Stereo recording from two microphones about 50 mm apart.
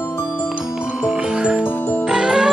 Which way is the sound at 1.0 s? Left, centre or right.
Centre.